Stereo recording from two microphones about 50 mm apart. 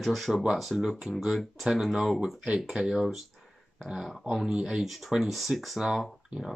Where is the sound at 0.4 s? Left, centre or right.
Centre.